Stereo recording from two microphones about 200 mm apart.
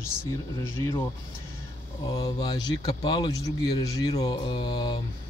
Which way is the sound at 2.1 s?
20° left (ahead or behind).